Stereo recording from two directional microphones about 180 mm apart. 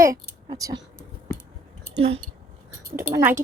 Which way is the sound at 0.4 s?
20° right (ahead or behind).